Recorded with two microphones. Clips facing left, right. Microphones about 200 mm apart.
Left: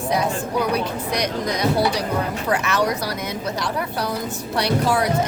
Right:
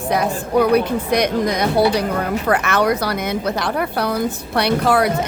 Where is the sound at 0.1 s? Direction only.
60° right (ahead or behind).